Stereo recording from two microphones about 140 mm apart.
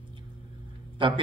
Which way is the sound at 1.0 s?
35° right (ahead or behind).